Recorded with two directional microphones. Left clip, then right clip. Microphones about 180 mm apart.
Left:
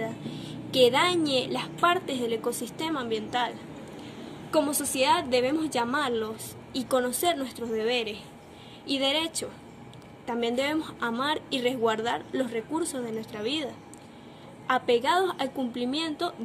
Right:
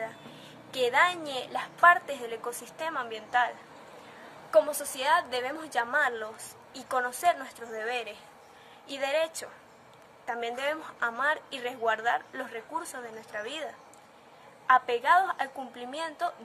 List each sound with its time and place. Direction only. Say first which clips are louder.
0.8 s a woman's voice: left 1 dB; 5° right (ahead or behind)
14.7 s a woman's voice: right 1 dB; 5° right (ahead or behind)